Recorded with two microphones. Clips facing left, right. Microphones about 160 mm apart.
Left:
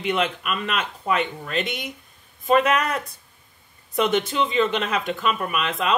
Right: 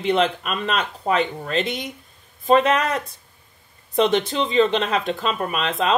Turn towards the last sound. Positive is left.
turn(degrees=-30)  # may be behind; listen again after turning